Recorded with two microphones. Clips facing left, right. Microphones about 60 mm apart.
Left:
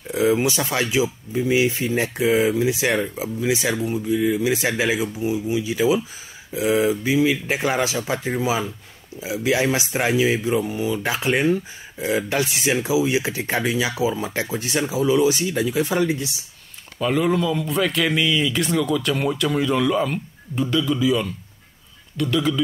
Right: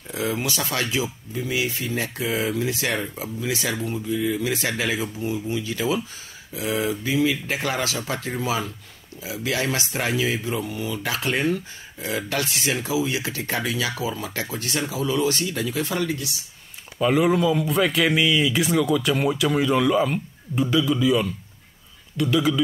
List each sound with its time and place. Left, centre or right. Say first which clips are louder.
0.1 s a man's voice: left 7 dB; centre
17.0 s a man's voice: right 1 dB; centre